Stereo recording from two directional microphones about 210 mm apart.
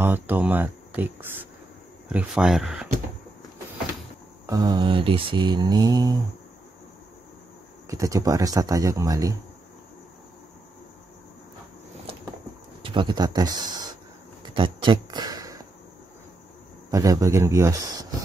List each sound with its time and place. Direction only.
0.0 s speech: 10° right (ahead or behind)
4.5 s speech: 20° right (ahead or behind)
7.9 s speech: 15° right (ahead or behind)
12.8 s speech: 20° right (ahead or behind)
14.4 s a sound: 20° right (ahead or behind)
16.9 s speech: 15° right (ahead or behind)